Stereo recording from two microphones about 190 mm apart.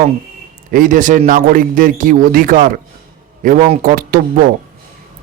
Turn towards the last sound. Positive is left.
turn(degrees=-50)  # may be behind; listen again after turning